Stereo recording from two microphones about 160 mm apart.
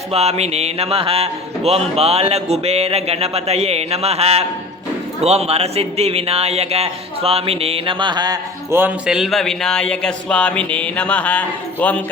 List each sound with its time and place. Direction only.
0.1 s speech: 40° right (ahead or behind); by 8.4 s 25° right (ahead or behind)
8.7 s speech: 10° right (ahead or behind); by 12.0 s 10° left (ahead or behind)